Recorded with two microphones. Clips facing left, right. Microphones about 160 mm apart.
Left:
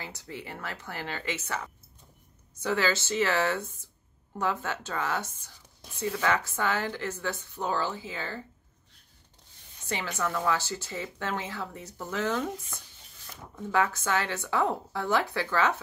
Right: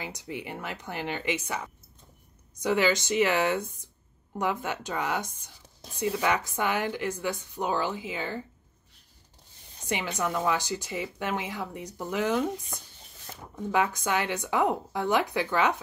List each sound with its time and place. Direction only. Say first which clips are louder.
0.0 s speech: right 4 dB; 15° right (ahead or behind)
9.8 s speech: right 2 dB; 15° right (ahead or behind)